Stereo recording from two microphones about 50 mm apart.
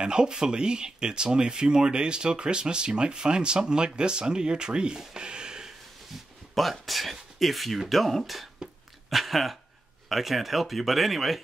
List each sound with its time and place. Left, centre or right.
0.0 s speech: centre
6.5 s speech: centre